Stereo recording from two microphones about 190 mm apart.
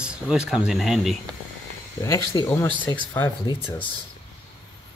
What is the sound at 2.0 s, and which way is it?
Speech, 15° left (ahead or behind).